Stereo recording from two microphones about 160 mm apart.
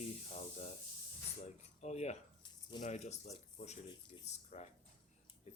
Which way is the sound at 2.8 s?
45° left (ahead or behind).